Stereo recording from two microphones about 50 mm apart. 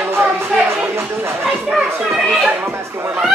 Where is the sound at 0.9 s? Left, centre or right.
Right.